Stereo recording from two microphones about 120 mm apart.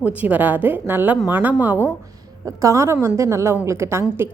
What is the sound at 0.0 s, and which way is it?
A woman's voice, 15° right (ahead or behind).